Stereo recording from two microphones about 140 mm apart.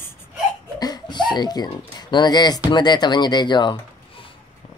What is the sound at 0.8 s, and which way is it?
Speech, 30° left (ahead or behind).